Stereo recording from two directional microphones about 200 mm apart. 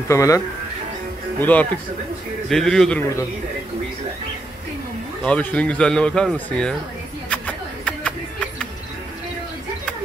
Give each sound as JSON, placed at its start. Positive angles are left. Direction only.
{"t": 0.1, "sound": "speech", "side_deg": 15}
{"t": 1.4, "sound": "speech", "side_deg": 10}
{"t": 5.2, "sound": "speech", "side_deg": 5}
{"t": 7.2, "sound": "a sound", "side_deg": 5}